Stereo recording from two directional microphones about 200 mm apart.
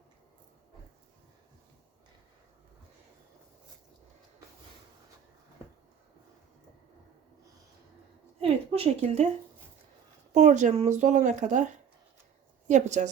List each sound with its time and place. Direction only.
8.4 s a woman's voice: 30° right (ahead or behind)
10.3 s a woman's voice: 35° right (ahead or behind)